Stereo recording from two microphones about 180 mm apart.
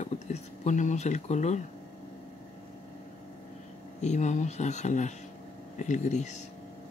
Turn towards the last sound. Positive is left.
turn(degrees=40)  # may be behind; listen again after turning